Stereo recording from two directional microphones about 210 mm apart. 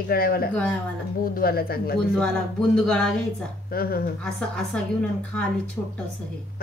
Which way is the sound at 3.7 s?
45° left (ahead or behind).